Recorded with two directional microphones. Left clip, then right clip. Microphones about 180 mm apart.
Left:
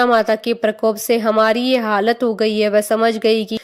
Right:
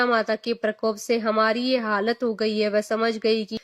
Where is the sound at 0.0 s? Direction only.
35° left (ahead or behind).